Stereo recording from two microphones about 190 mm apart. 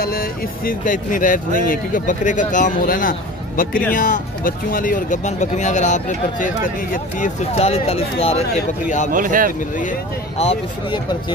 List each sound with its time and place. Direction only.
0.0 s speech: 50° left (ahead or behind); by 8.5 s 30° left (ahead or behind)
9.1 s speech: 45° right (ahead or behind)
10.4 s speech: 25° left (ahead or behind)